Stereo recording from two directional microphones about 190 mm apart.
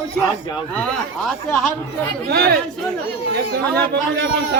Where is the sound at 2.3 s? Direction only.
55° right (ahead or behind).